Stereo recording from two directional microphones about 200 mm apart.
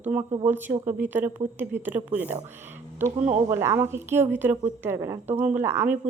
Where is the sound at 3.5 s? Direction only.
15° right (ahead or behind).